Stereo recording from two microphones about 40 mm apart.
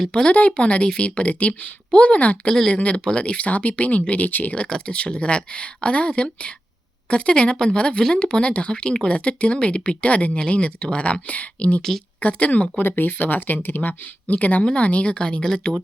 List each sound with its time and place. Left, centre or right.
0.1 s speech: left
4.3 s speech: left
4.5 s speech: left
11.8 s speech: centre
12.2 s speech: left
12.8 s speech: left